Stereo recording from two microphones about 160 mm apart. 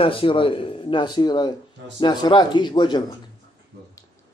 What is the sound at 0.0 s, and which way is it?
A man's voice, 35° left (ahead or behind).